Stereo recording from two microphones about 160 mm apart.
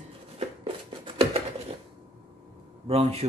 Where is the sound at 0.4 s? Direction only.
35° right (ahead or behind).